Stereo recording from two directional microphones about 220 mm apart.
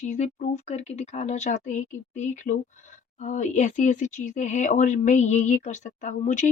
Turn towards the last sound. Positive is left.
turn(degrees=35)  # may be behind; listen again after turning